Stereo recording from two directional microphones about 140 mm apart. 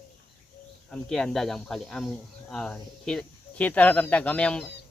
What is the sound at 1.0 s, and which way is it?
Speech, 5° left (ahead or behind).